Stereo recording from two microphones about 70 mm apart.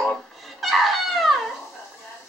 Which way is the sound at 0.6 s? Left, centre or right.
Centre.